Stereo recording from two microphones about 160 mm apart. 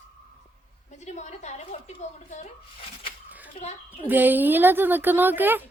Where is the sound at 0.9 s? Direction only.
45° left (ahead or behind).